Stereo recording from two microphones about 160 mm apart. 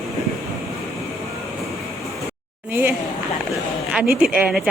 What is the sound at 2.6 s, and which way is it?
Speech, 15° right (ahead or behind).